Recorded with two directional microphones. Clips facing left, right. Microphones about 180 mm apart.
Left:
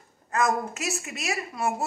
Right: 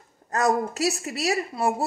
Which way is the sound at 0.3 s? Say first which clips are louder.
Right 3 dB; 35° right (ahead or behind).